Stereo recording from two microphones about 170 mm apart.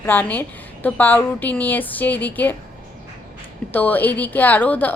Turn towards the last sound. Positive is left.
turn(degrees=10)  # may be behind; listen again after turning